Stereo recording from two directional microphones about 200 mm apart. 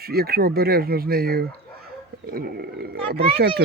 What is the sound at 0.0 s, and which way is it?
Speech, 50° right (ahead or behind).